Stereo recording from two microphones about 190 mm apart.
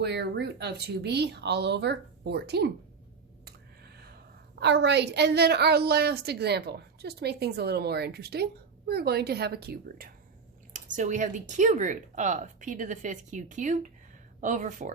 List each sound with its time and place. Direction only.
0.0 s a woman's voice: 60° right (ahead or behind)
3.4 s a sound: 55° right (ahead or behind)
4.6 s a woman's voice: 65° right (ahead or behind)
10.7 s a woman's voice: 45° right (ahead or behind)